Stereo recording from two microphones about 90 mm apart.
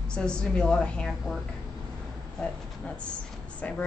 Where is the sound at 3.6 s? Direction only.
15° left (ahead or behind).